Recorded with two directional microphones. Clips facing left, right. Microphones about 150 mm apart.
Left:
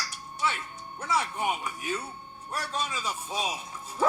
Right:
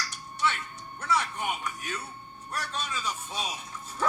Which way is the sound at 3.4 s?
10° left (ahead or behind).